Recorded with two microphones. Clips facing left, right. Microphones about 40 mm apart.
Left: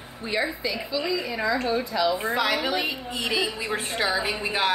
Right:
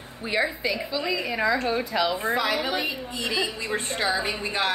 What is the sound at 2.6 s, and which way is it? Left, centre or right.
Speech, left.